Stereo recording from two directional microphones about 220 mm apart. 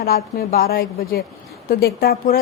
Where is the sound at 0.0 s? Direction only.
45° left (ahead or behind).